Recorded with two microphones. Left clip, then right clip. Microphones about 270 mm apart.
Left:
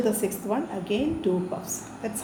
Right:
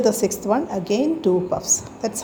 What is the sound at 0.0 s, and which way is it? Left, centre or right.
A woman's voice, right.